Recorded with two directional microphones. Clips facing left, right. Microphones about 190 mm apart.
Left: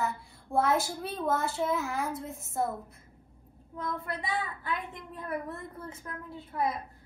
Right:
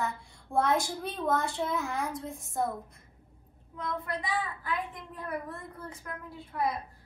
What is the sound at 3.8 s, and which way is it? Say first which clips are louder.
Speech: right 1 dB; 25° left (ahead or behind).